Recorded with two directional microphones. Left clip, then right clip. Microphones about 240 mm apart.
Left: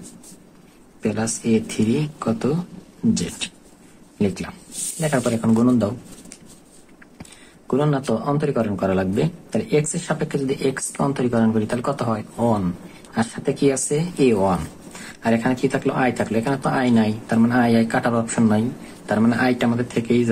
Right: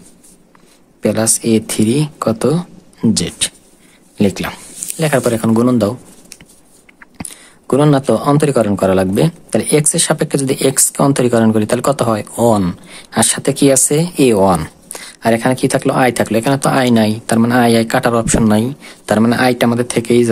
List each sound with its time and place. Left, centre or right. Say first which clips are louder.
1.0 s speech: right 9 dB; right
7.0 s speech: right 11 dB; right